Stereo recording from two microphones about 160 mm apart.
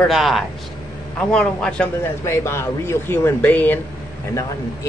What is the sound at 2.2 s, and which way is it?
Speech, 15° left (ahead or behind).